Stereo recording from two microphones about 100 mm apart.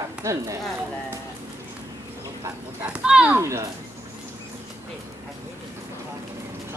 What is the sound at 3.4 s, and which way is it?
Speech, 30° right (ahead or behind).